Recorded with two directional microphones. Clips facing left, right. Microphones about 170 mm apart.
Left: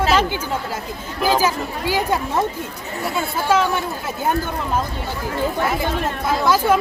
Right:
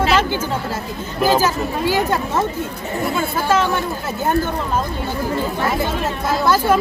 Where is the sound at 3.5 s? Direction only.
10° left (ahead or behind).